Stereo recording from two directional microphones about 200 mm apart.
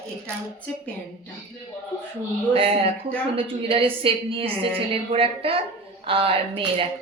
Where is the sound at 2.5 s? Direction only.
30° right (ahead or behind).